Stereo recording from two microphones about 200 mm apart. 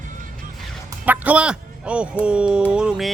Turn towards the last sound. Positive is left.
turn(degrees=-5)  # may be behind; listen again after turning